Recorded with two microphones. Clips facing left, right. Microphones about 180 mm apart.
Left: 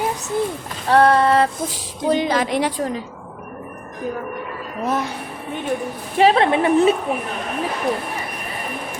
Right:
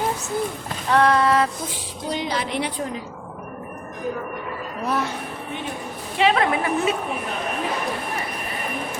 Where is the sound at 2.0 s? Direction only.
50° left (ahead or behind).